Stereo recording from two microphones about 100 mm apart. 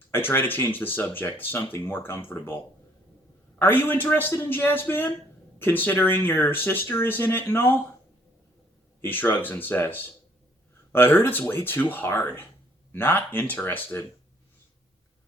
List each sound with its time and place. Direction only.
0.1 s speech: 20° left (ahead or behind)
3.6 s speech: 20° left (ahead or behind)
9.0 s speech: 20° left (ahead or behind)